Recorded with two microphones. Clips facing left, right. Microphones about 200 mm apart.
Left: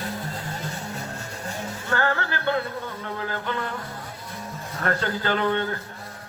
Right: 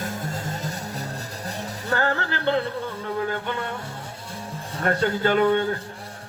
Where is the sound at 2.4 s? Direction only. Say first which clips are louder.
Right 3 dB; 30° right (ahead or behind).